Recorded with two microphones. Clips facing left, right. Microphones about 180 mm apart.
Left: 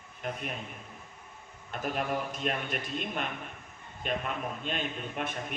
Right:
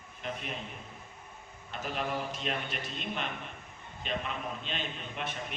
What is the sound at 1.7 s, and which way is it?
A man's voice, 50° left (ahead or behind).